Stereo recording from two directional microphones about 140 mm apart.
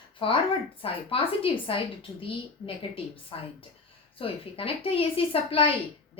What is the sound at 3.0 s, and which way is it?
Speech, 40° left (ahead or behind).